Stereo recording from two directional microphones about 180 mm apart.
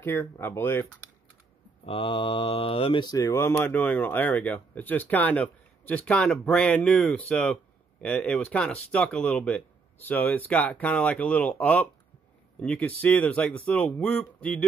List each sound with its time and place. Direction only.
0.0 s speech: 10° left (ahead or behind)
1.9 s speech: 30° left (ahead or behind); by 14.6 s 5° left (ahead or behind)